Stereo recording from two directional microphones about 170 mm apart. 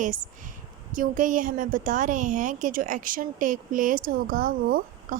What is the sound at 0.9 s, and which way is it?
A woman's voice, 50° right (ahead or behind).